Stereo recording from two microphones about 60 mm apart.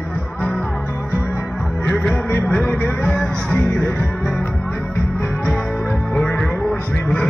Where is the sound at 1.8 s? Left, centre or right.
Centre.